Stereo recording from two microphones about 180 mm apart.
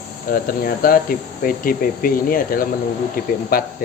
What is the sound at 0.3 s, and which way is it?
Speech, 55° left (ahead or behind).